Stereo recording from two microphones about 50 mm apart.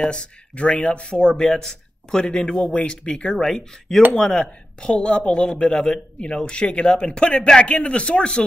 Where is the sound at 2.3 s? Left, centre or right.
Left.